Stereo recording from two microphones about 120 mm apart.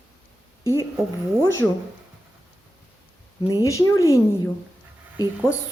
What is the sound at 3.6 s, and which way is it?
Speech, 25° left (ahead or behind).